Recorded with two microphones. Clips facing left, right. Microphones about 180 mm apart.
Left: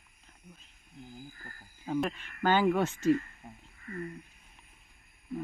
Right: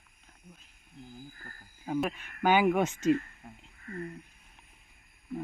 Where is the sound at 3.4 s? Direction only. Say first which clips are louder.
Even; 20° left (ahead or behind).